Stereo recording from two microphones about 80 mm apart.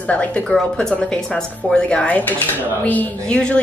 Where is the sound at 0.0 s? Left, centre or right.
Centre.